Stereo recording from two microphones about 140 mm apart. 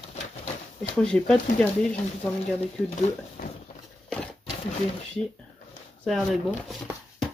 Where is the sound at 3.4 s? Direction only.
85° left.